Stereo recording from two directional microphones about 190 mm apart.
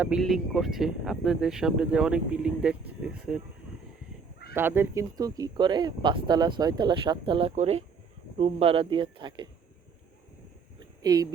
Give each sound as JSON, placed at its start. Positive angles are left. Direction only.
{"t": 0.0, "sound": "speech", "side_deg": -5}
{"t": 4.5, "sound": "speech", "side_deg": -10}
{"t": 11.0, "sound": "speech", "side_deg": -20}